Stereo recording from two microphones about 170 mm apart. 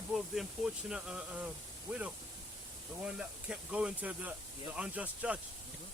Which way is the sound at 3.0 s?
5° right (ahead or behind).